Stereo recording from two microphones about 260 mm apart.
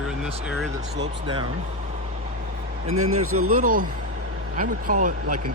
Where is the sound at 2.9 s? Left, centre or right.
Right.